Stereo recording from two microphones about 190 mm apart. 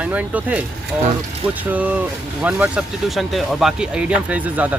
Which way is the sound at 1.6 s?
10° right (ahead or behind).